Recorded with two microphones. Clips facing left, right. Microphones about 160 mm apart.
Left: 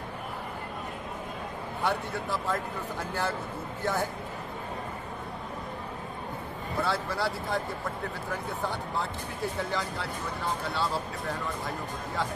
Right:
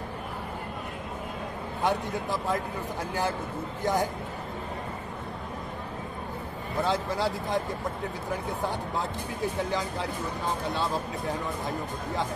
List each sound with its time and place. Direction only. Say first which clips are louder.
1.8 s speech: right 3 dB; 15° right (ahead or behind)
6.8 s speech: right 3 dB; 15° right (ahead or behind)